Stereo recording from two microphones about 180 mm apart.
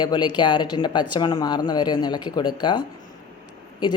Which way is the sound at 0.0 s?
25° left (ahead or behind).